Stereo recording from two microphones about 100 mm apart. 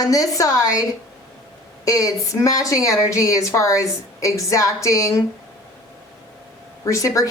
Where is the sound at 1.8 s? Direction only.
35° left (ahead or behind).